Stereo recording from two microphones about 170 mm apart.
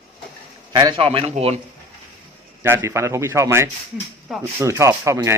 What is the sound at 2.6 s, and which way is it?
A man's voice, 15° right (ahead or behind).